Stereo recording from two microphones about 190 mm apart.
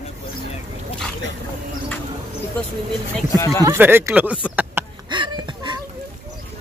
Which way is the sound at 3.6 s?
10° right (ahead or behind).